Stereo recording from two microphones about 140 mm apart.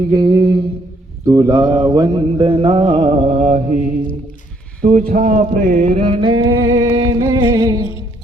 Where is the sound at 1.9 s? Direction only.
30° right (ahead or behind); by 3.9 s 55° right (ahead or behind).